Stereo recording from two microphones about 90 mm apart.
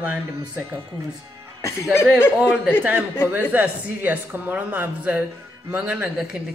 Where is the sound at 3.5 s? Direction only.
20° right (ahead or behind).